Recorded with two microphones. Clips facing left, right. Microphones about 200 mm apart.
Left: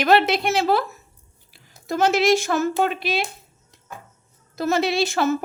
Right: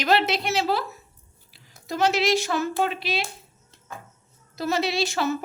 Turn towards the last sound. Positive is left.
turn(degrees=50)  # may be behind; listen again after turning